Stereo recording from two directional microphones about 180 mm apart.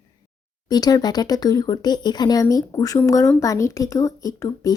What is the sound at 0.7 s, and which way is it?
Speech, 20° left (ahead or behind).